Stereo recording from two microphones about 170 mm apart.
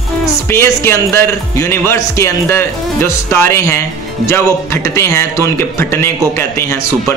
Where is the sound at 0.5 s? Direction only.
15° left (ahead or behind).